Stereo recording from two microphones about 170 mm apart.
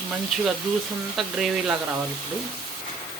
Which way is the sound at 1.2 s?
Centre (ahead or behind).